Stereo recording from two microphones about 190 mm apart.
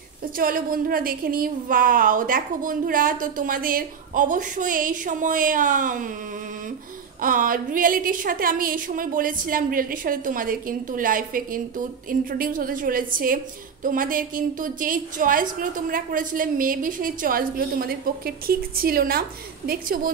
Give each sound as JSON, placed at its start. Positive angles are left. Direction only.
{"t": 0.4, "sound": "a woman's voice", "side_deg": -50}
{"t": 7.2, "sound": "a woman's voice", "side_deg": -45}